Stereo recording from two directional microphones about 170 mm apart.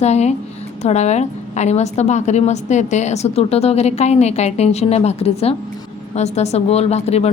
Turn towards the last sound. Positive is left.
turn(degrees=40)  # may be behind; listen again after turning